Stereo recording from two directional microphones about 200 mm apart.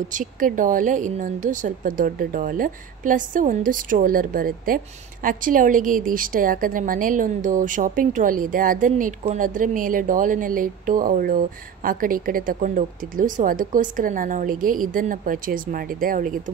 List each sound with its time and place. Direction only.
0.1 s a woman's voice: 40° right (ahead or behind)